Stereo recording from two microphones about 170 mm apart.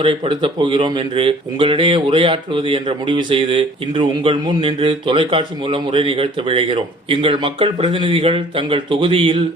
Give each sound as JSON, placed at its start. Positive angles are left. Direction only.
{"t": 0.0, "sound": "speech", "side_deg": -30}